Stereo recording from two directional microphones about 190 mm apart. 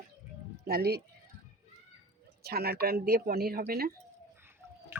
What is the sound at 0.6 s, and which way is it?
Speech, 55° right (ahead or behind).